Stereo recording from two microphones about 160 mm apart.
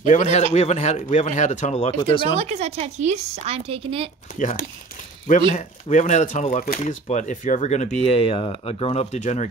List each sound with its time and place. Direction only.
0.0 s speech: 50° left (ahead or behind)
2.3 s a woman's voice: 40° right (ahead or behind)
4.4 s speech: 50° left (ahead or behind)